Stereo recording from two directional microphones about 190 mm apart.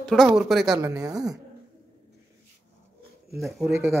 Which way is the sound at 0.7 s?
15° right (ahead or behind).